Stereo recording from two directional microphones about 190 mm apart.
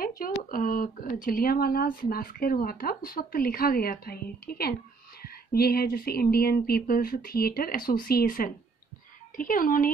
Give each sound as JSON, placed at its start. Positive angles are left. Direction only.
{"t": 0.0, "sound": "speech", "side_deg": 50}